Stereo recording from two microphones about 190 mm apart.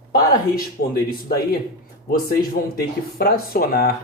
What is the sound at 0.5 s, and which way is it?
Speech, 50° left (ahead or behind).